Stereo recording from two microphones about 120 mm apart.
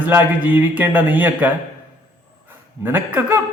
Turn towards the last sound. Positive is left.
turn(degrees=-15)  # may be behind; listen again after turning